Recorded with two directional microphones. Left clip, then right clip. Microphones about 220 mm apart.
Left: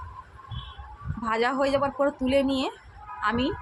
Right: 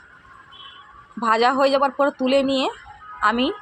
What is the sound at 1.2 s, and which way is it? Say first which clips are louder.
Speech: right 8 dB; 20° right (ahead or behind).